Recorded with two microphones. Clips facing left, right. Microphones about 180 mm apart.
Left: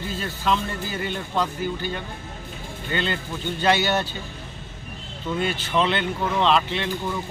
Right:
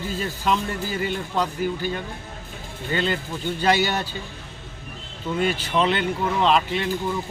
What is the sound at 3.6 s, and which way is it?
Speech, 10° right (ahead or behind).